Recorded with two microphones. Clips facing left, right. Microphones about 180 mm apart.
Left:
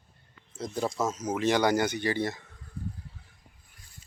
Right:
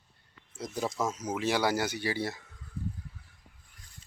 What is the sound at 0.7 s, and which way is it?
Speech, centre (ahead or behind).